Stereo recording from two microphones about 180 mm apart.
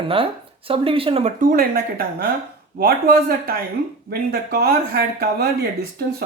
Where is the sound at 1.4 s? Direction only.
55° right (ahead or behind).